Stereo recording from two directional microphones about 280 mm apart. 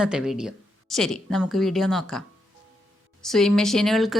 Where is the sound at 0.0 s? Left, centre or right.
Centre.